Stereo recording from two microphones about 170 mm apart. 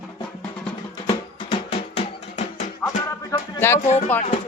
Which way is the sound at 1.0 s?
35° left (ahead or behind).